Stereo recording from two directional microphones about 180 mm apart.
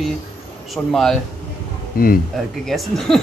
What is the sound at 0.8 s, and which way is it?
Speech, 5° left (ahead or behind).